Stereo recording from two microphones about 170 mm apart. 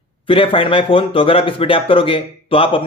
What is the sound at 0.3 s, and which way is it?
Speech, 30° left (ahead or behind).